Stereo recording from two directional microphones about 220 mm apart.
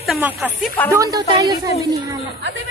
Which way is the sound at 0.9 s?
15° right (ahead or behind).